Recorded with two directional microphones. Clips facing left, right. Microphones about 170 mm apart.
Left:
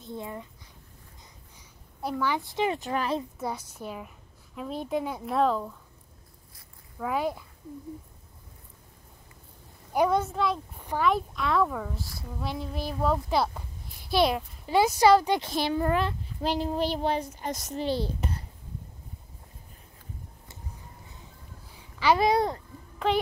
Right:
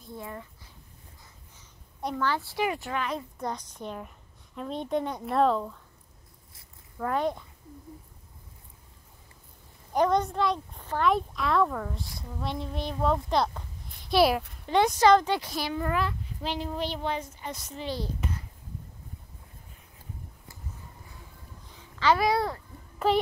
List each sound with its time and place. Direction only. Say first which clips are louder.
0.0 s speech: left 3 dB; 20° left (ahead or behind)
2.0 s a woman's voice: even; 5° left (ahead or behind); by 3.2 s 35° left (ahead or behind)
3.3 s a woman's voice: even; 10° left (ahead or behind)
7.0 s speech: right 1 dB; 5° left (ahead or behind)
9.9 s a woman's voice: even; 5° left (ahead or behind)
15.4 s a woman's voice: left 4 dB; 25° left (ahead or behind)
21.7 s a sound: left 1 dB; 10° left (ahead or behind)
22.2 s a woman's voice: left 2 dB; 20° left (ahead or behind)